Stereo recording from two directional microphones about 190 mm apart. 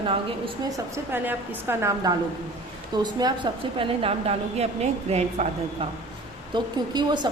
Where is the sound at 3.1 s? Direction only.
25° right (ahead or behind).